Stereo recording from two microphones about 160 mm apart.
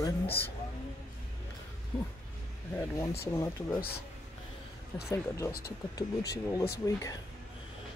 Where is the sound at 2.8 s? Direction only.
20° left (ahead or behind).